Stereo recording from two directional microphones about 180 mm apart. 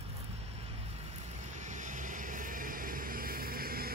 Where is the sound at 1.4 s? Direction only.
40° right (ahead or behind).